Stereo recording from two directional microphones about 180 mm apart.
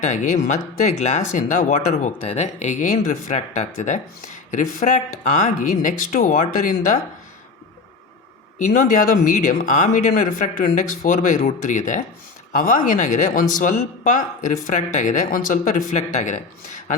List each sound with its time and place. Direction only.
0.0 s speech: 40° left (ahead or behind)
8.5 s speech: 45° left (ahead or behind)